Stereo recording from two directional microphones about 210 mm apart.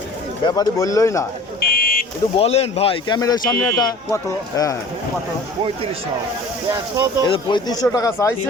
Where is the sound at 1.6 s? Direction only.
45° left (ahead or behind).